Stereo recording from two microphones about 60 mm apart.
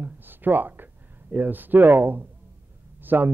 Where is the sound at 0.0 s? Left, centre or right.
Right.